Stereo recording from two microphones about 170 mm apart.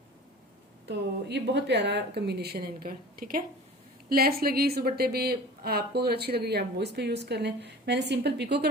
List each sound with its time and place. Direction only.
0.9 s a woman's voice: 90° right